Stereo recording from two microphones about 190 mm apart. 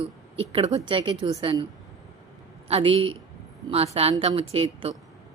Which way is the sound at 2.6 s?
30° right (ahead or behind).